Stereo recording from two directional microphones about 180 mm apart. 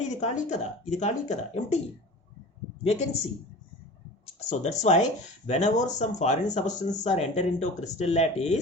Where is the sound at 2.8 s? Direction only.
35° left (ahead or behind).